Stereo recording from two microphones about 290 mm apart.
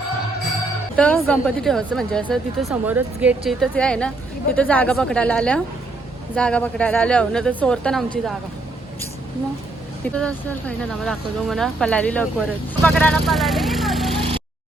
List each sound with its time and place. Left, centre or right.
0.9 s speech: centre
10.2 s speech: centre
14.2 s vehicle: centre